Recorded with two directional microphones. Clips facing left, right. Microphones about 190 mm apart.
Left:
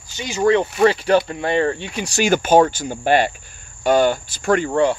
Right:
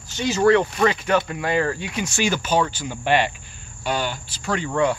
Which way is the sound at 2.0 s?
40° left (ahead or behind).